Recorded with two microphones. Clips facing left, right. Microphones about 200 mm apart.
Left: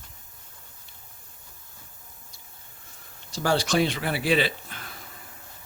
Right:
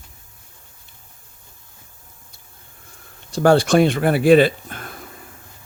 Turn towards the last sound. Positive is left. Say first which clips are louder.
# right 11 dB
turn(degrees=-50)  # may be behind; listen again after turning